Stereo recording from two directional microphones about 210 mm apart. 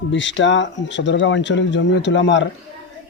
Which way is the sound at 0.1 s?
60° left (ahead or behind).